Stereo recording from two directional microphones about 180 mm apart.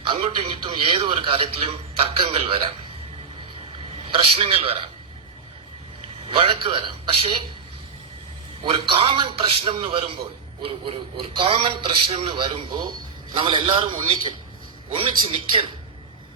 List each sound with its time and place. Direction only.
0.0 s a man's voice: 30° right (ahead or behind)
4.2 s a man's voice: 30° right (ahead or behind)
6.3 s a man's voice: 30° right (ahead or behind)
8.6 s a man's voice: 30° right (ahead or behind)